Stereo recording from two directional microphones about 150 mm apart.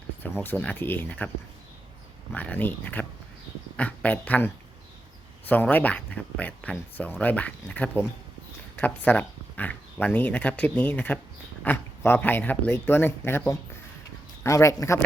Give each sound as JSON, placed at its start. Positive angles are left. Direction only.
{"t": 0.4, "sound": "speech", "side_deg": 10}
{"t": 2.3, "sound": "speech", "side_deg": 10}